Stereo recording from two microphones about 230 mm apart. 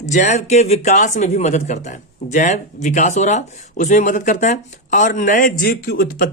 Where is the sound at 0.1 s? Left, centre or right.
Left.